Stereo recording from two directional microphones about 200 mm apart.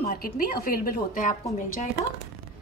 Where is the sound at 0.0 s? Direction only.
50° left (ahead or behind).